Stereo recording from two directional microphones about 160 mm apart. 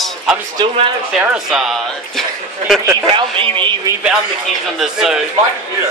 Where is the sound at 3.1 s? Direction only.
30° right (ahead or behind).